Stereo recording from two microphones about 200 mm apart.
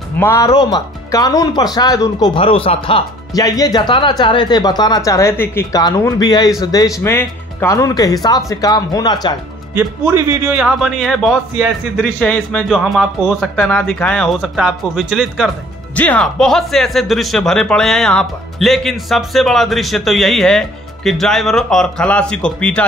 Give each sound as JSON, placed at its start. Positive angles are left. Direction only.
{"t": 0.2, "sound": "speech", "side_deg": 15}
{"t": 9.8, "sound": "speech", "side_deg": -10}